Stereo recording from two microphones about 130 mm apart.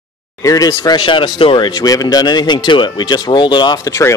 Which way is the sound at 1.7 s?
30° left (ahead or behind).